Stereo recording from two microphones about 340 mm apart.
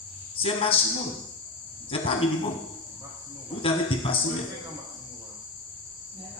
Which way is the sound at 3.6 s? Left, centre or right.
Centre.